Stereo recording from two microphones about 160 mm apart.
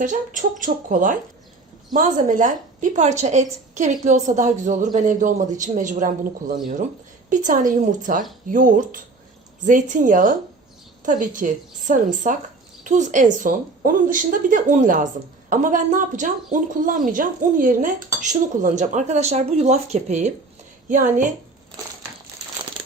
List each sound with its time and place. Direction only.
0.0 s a woman's voice: 55° right (ahead or behind)